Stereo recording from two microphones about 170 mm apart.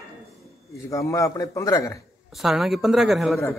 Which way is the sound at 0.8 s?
20° left (ahead or behind).